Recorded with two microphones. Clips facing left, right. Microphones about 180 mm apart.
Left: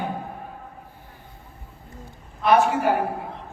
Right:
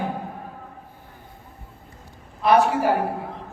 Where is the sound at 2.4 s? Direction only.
35° right (ahead or behind).